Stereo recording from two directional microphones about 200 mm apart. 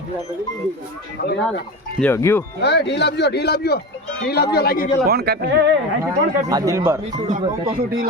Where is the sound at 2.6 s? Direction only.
55° left (ahead or behind).